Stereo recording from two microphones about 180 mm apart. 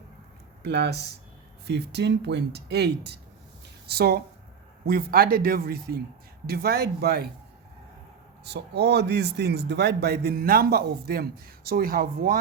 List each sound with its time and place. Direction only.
0.6 s a man's voice: 70° right (ahead or behind)
8.4 s a man's voice: 65° right (ahead or behind)